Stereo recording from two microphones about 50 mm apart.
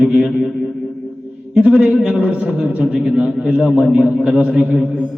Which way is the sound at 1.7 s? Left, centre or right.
Right.